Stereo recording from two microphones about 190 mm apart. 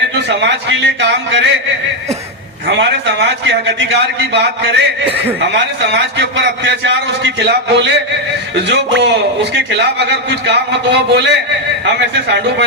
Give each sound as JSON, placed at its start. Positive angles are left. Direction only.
{"t": 0.3, "sound": "a man's voice", "side_deg": -65}
{"t": 2.6, "sound": "a man's voice", "side_deg": -65}